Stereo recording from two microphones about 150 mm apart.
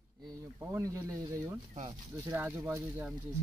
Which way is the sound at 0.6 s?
20° right (ahead or behind).